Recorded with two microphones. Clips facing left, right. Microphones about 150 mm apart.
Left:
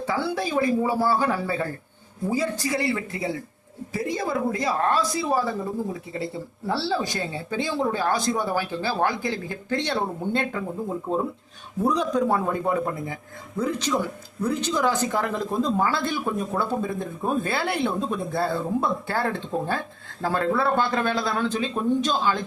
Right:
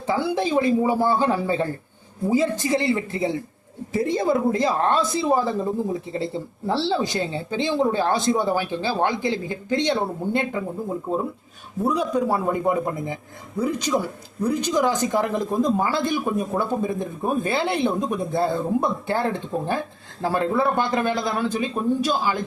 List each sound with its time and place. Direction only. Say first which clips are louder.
0.1 s a woman's voice: right 5 dB; 20° right (ahead or behind)